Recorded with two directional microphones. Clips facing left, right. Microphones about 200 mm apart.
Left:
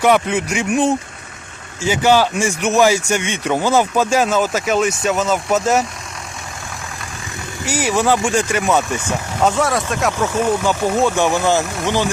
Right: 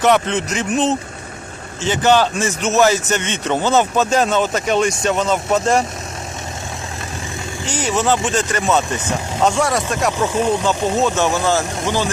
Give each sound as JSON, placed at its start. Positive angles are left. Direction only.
{"t": 0.0, "sound": "speech", "side_deg": 10}
{"t": 7.6, "sound": "speech", "side_deg": 10}
{"t": 10.1, "sound": "speech", "side_deg": -10}
{"t": 10.6, "sound": "speech", "side_deg": 10}